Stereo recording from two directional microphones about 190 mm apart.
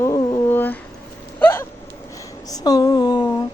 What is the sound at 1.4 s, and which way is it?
Hiccup, 10° left (ahead or behind).